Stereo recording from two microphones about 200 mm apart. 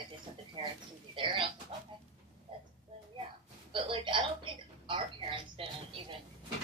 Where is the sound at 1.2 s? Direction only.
25° right (ahead or behind).